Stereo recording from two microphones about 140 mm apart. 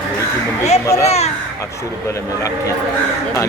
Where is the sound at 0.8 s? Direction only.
20° left (ahead or behind).